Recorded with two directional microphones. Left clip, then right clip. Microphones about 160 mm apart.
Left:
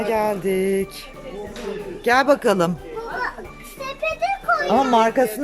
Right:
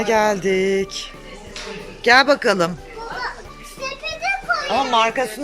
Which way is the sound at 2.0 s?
15° left (ahead or behind).